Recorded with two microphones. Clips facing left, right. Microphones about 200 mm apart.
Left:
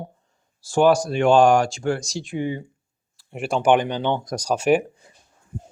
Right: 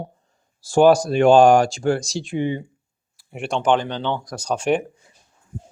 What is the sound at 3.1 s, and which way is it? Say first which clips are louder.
Speech: left 1 dB; centre (ahead or behind).